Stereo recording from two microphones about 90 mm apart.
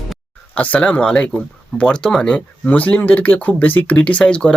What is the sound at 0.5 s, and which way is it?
Speech, 15° left (ahead or behind).